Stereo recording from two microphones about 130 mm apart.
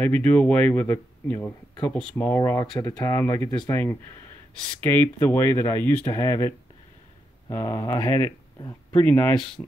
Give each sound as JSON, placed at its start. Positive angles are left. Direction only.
{"t": 0.0, "sound": "speech", "side_deg": 10}
{"t": 3.4, "sound": "speech", "side_deg": 30}
{"t": 3.7, "sound": "speech", "side_deg": 15}
{"t": 7.5, "sound": "speech", "side_deg": 25}